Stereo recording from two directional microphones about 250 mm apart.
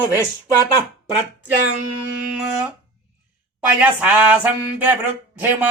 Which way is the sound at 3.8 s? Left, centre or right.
Centre.